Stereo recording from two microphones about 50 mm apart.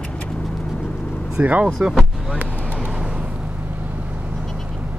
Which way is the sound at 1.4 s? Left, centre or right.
Right.